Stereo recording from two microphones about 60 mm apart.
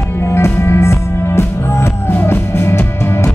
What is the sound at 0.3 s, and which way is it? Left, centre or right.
Music, left.